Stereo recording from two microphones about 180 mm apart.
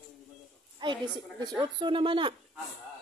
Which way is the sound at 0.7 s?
25° right (ahead or behind).